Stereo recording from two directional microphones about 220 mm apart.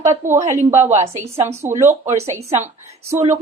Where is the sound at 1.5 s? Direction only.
10° right (ahead or behind).